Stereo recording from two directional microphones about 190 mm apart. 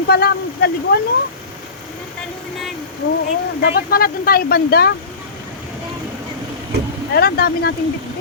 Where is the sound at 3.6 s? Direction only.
55° left (ahead or behind).